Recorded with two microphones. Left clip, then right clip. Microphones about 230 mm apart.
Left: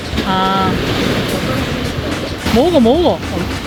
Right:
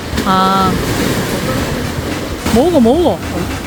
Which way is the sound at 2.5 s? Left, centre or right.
Centre.